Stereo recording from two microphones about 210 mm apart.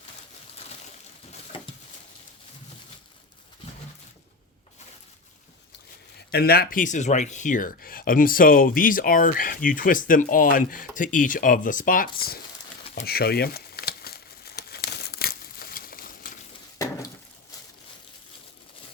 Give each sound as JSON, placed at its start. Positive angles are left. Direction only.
{"t": 6.3, "sound": "speech", "side_deg": 50}
{"t": 13.1, "sound": "crumpling", "side_deg": 45}